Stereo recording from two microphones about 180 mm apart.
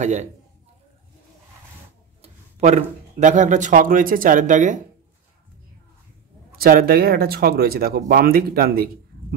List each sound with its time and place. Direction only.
0.0 s a man's voice: 40° right (ahead or behind)
2.2 s speech: 35° right (ahead or behind)
6.5 s speech: 55° right (ahead or behind)